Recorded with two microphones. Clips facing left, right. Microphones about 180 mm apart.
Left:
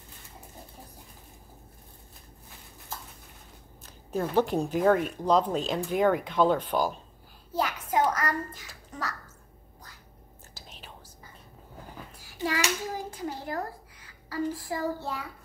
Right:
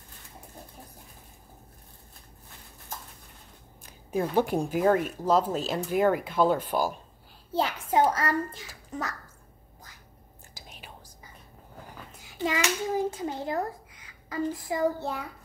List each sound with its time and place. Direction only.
3.8 s speech: 10° right (ahead or behind)
7.5 s a child's voice: 25° right (ahead or behind)
10.5 s whispering: 10° right (ahead or behind)
12.2 s a sound: 20° right (ahead or behind)
13.1 s a woman's voice: 20° right (ahead or behind)